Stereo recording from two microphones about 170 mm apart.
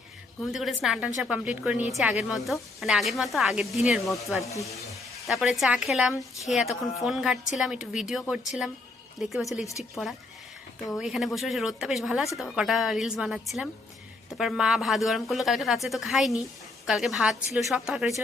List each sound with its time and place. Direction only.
0.4 s a woman's voice: centre (ahead or behind)
4.5 s speech: 20° left (ahead or behind)
5.1 s a woman's voice: centre (ahead or behind)